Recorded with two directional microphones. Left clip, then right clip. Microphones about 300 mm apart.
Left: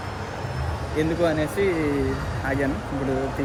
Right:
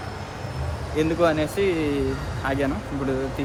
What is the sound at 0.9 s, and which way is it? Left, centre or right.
Speech, centre.